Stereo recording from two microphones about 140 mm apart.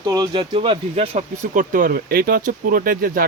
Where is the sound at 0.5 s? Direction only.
40° right (ahead or behind).